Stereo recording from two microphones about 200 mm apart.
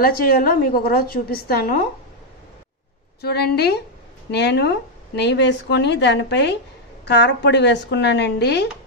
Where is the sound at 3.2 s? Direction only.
55° left (ahead or behind).